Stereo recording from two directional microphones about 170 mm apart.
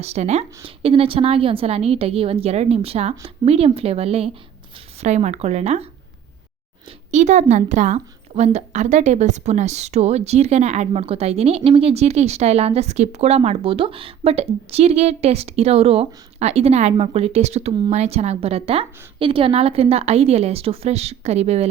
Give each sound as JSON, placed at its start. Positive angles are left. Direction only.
{"t": 0.0, "sound": "a woman's voice", "side_deg": -40}
{"t": 7.1, "sound": "a woman's voice", "side_deg": -45}